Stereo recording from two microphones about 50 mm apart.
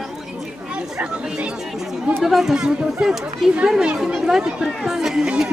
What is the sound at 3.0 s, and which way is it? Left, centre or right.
Speech, right.